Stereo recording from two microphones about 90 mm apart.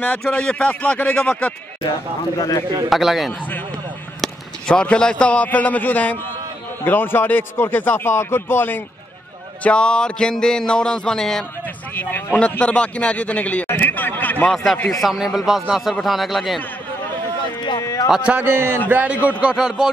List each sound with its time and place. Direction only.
0.2 s a sound: 10° left (ahead or behind)
2.3 s speech: 40° left (ahead or behind)
2.9 s speech: centre (ahead or behind)
3.3 s a man's voice: 20° left (ahead or behind)
4.2 s a man's voice: 10° left (ahead or behind)
9.6 s a sound: 10° left (ahead or behind)
11.9 s a sound: 20° left (ahead or behind)
13.7 s a man's voice: 20° left (ahead or behind)
14.5 s speech: 5° left (ahead or behind)
17.7 s a sound: 40° left (ahead or behind)
18.1 s a man's voice: 10° right (ahead or behind)
18.4 s a man's voice: 25° right (ahead or behind); by 19.9 s 5° right (ahead or behind)